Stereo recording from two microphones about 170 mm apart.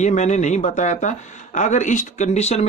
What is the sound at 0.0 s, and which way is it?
Speech, 45° left (ahead or behind).